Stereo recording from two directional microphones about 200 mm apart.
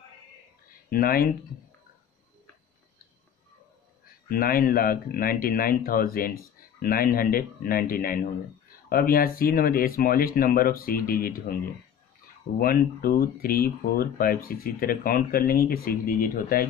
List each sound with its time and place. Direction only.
0.8 s speech: 45° left (ahead or behind)
4.3 s speech: 45° left (ahead or behind)
12.5 s speech: 45° left (ahead or behind)